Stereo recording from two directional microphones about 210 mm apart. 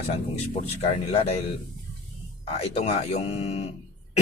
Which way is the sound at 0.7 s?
30° left (ahead or behind).